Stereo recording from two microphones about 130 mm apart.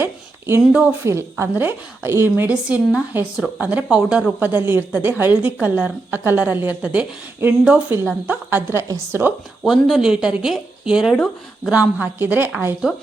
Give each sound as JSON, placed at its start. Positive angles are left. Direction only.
{"t": 0.0, "sound": "a sound", "side_deg": -20}
{"t": 0.7, "sound": "a woman's voice", "side_deg": -10}
{"t": 1.0, "sound": "a woman's voice", "side_deg": -20}
{"t": 9.6, "sound": "speech", "side_deg": 0}
{"t": 11.7, "sound": "a woman's voice", "side_deg": -10}
{"t": 12.8, "sound": "speech", "side_deg": -5}